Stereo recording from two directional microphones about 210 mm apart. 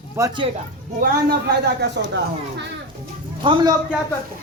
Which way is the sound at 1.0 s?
50° right (ahead or behind).